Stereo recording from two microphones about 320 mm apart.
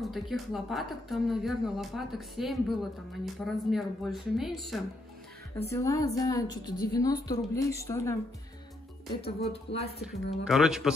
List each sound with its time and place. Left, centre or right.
0.0 s a woman's voice: centre
9.2 s a woman's voice: centre
10.3 s speech: centre